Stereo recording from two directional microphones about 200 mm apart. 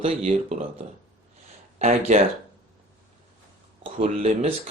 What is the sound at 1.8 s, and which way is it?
Speech, 30° right (ahead or behind).